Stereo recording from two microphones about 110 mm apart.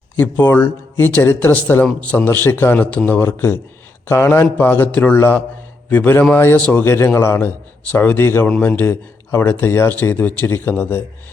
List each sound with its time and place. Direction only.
0.2 s a man's voice: 20° left (ahead or behind)